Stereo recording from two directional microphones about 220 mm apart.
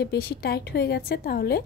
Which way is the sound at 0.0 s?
45° left (ahead or behind).